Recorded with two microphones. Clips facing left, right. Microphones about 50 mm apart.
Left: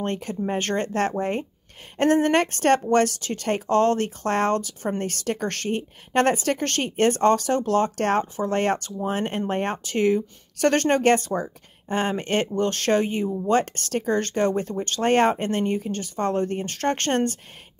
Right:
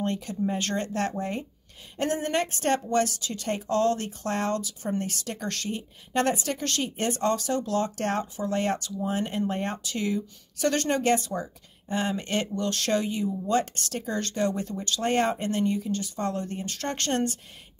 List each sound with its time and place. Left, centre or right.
0.0 s speech: left